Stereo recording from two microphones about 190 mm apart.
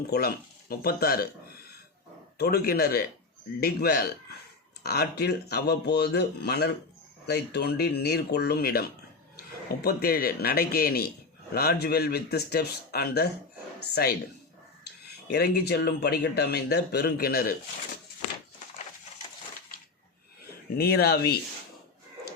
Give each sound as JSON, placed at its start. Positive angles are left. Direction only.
{"t": 0.1, "sound": "speech", "side_deg": 55}
{"t": 2.4, "sound": "speech", "side_deg": 55}
{"t": 15.3, "sound": "speech", "side_deg": 55}
{"t": 20.7, "sound": "speech", "side_deg": 55}